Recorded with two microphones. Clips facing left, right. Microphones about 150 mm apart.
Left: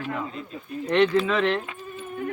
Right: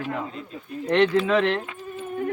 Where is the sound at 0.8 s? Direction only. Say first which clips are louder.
Right 1 dB; 45° right (ahead or behind).